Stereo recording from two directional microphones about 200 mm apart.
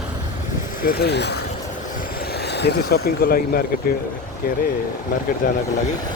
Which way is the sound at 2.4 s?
55° left (ahead or behind).